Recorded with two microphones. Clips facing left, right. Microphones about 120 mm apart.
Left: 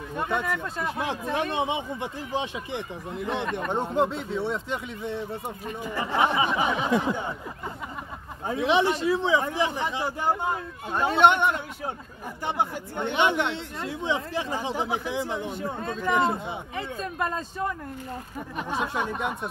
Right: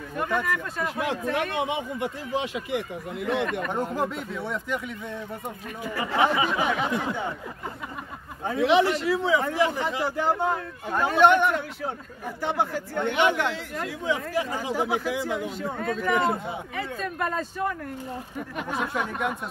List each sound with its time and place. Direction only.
0.1 s speech: 25° left (ahead or behind)
8.5 s speech: 20° left (ahead or behind)
18.6 s speech: 25° left (ahead or behind)